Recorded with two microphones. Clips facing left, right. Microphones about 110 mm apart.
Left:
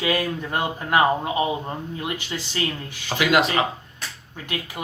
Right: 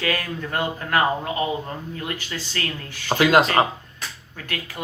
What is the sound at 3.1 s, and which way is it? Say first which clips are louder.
Speech: right 3 dB; 40° right (ahead or behind).